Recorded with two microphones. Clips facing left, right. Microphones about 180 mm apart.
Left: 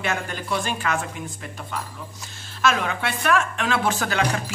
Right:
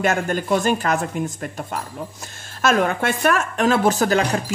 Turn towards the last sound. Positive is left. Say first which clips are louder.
# right 5 dB
turn(degrees=-40)  # may be behind; listen again after turning